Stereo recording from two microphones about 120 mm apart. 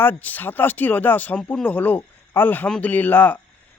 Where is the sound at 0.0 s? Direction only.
15° left (ahead or behind).